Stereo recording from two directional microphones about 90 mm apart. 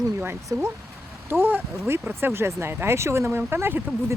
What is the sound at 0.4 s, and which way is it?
Speech, 30° right (ahead or behind).